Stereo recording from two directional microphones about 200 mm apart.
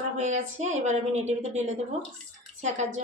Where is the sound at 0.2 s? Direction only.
35° right (ahead or behind).